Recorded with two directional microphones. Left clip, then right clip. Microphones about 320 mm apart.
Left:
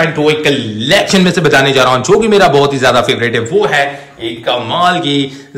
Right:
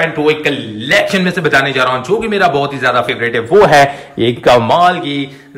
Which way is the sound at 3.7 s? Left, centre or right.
Centre.